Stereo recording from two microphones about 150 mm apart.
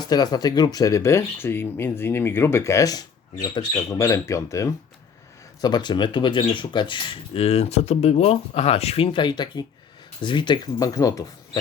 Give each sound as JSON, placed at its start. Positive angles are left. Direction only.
{"t": 0.0, "sound": "speech", "side_deg": 25}